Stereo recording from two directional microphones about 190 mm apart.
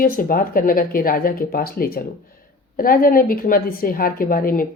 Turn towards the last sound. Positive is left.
turn(degrees=50)  # may be behind; listen again after turning